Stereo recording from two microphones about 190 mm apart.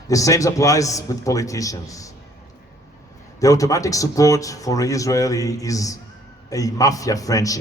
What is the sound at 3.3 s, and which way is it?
A man's voice, 15° left (ahead or behind).